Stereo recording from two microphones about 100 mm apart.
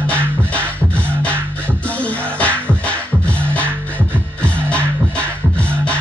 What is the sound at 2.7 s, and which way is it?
Music, 10° left (ahead or behind).